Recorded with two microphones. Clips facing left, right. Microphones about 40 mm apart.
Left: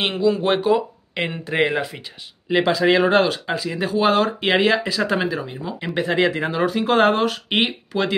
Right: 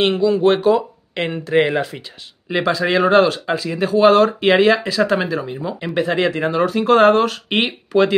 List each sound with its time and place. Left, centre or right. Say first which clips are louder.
0.0 s speech: right 5 dB; centre